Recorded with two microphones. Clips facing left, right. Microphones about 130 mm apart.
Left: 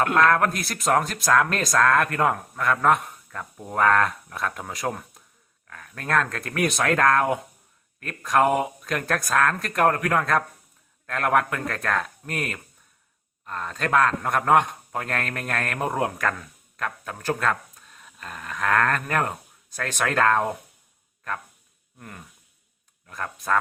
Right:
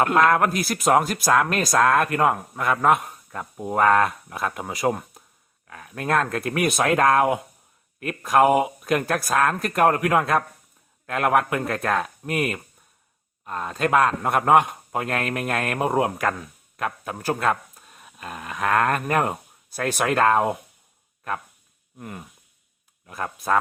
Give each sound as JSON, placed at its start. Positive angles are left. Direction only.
{"t": 0.0, "sound": "speech", "side_deg": -5}
{"t": 1.7, "sound": "speech", "side_deg": -20}
{"t": 2.0, "sound": "speech", "side_deg": -10}
{"t": 21.9, "sound": "speech", "side_deg": -15}